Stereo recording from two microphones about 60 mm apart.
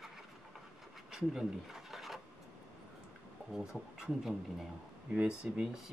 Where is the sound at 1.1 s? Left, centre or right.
Centre.